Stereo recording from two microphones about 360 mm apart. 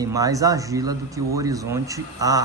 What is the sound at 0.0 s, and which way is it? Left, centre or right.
Speech, centre.